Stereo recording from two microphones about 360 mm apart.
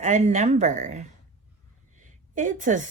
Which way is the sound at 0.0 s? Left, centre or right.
Centre.